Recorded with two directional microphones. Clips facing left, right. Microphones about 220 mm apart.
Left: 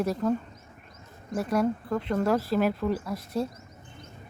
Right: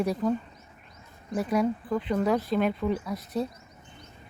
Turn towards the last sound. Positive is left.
turn(degrees=0)  # may be behind; listen again after turning